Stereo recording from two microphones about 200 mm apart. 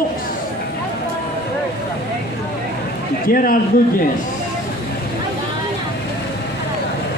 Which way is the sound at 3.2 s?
45° left (ahead or behind).